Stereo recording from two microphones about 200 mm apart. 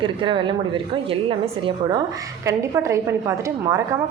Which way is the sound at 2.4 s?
15° right (ahead or behind).